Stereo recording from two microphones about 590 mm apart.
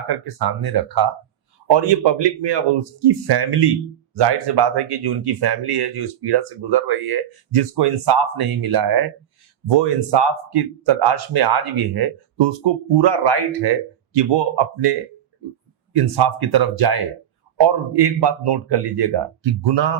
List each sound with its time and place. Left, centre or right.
0.1 s speech: right